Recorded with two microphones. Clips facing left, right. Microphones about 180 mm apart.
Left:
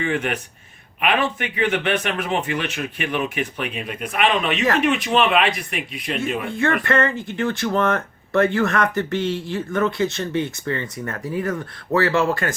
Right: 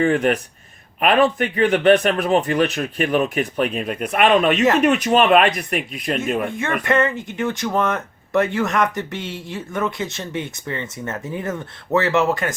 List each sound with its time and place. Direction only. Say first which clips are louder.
0.0 s a man's voice: right 6 dB; 40° right (ahead or behind)
6.8 s speech: right 1 dB; 20° right (ahead or behind)